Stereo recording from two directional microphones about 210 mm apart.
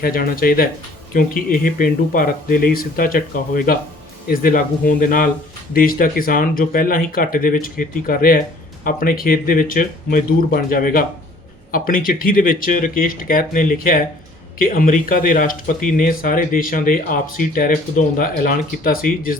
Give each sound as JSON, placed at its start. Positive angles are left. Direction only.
{"t": 0.0, "sound": "speech", "side_deg": 45}